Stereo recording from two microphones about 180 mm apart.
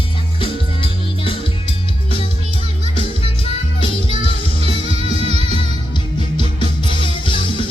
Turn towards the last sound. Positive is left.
turn(degrees=30)  # may be behind; listen again after turning